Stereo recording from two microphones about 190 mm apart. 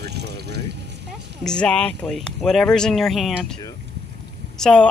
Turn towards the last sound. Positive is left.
turn(degrees=5)  # may be behind; listen again after turning